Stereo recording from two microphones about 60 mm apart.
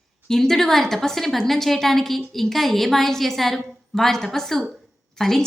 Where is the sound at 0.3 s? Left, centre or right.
Centre.